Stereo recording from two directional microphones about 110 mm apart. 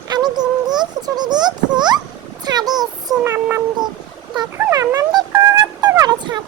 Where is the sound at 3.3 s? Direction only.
20° right (ahead or behind).